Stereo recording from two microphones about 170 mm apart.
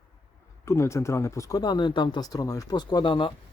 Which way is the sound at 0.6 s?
15° left (ahead or behind).